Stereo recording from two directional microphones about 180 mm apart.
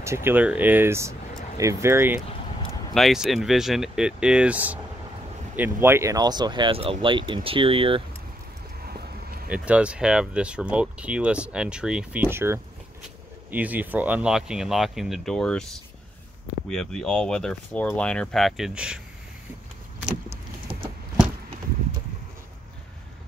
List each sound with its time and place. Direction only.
0.0 s speech: 15° right (ahead or behind)
2.9 s speech: centre (ahead or behind); by 8.0 s 30° right (ahead or behind)
8.8 s vehicle: 55° right (ahead or behind)
9.5 s speech: 5° right (ahead or behind)
20.1 s vehicle: 30° right (ahead or behind)